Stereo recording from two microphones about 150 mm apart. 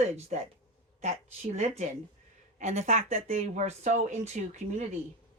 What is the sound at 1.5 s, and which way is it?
Speech, 45° right (ahead or behind).